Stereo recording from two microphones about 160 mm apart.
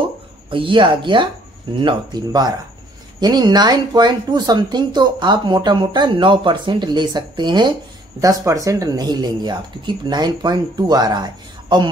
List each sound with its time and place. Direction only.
0.5 s speech: 30° right (ahead or behind)